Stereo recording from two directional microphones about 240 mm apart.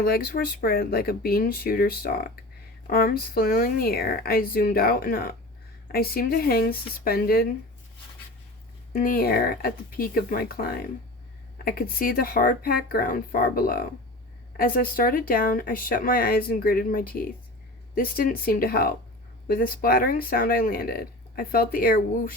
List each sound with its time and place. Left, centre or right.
0.0 s speech: left
8.9 s speech: left